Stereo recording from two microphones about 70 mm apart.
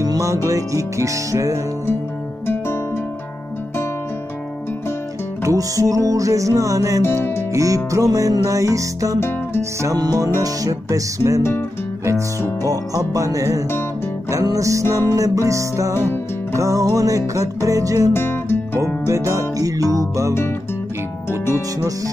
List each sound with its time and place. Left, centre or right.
0.0 s music: right
5.4 s music: right
9.9 s music: right
12.6 s music: right
15.9 s music: left
16.5 s music: right
18.1 s music: left
19.0 s music: right
21.3 s music: left